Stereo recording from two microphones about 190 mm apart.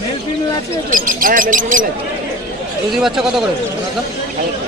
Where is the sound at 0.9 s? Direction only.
45° right (ahead or behind).